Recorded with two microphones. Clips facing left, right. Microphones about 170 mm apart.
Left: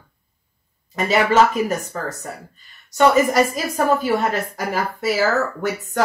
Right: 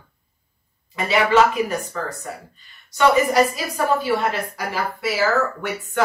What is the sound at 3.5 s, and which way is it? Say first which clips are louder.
A woman's voice: left 2 dB; 45° left (ahead or behind).